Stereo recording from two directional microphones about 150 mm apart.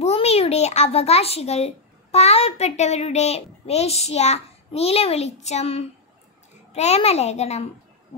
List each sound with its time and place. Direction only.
0.0 s a child's voice: 45° left (ahead or behind)